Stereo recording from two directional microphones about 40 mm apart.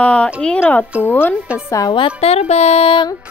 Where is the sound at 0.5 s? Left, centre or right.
Left.